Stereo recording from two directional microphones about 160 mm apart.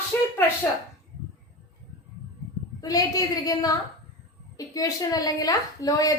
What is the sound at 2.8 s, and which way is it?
A woman's voice, 20° left (ahead or behind).